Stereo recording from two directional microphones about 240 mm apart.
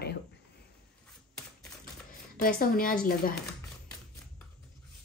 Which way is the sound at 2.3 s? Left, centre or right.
Left.